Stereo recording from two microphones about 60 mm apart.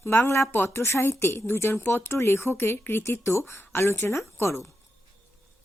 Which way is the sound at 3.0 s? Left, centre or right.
Left.